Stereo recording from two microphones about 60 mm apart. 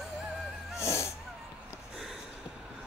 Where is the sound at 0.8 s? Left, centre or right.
Left.